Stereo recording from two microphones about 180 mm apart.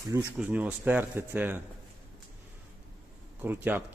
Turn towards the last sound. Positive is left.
turn(degrees=-10)  # may be behind; listen again after turning